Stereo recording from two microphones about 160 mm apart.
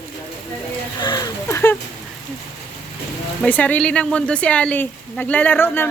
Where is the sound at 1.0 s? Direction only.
25° left (ahead or behind).